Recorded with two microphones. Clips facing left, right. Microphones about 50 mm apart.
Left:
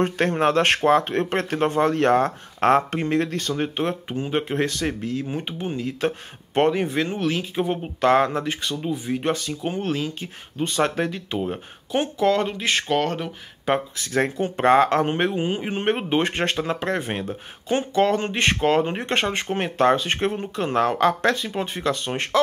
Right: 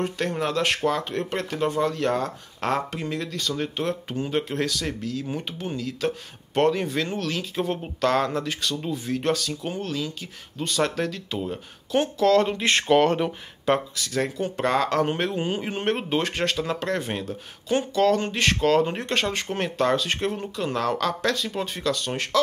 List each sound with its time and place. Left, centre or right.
0.0 s speech: left
12.4 s speech: centre
13.9 s speech: left